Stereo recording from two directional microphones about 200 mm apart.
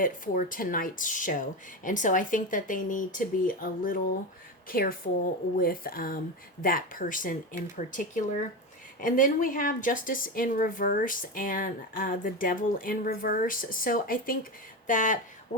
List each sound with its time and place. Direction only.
0.0 s a woman's voice: 40° left (ahead or behind)